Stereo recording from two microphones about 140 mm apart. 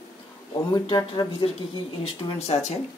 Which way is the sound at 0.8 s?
35° left (ahead or behind).